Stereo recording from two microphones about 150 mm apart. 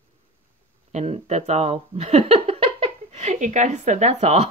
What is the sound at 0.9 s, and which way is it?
Speech, 45° right (ahead or behind).